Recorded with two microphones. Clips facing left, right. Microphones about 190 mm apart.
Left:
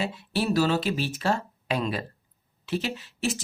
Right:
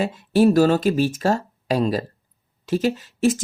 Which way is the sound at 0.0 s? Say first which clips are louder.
Right 11 dB; 45° right (ahead or behind).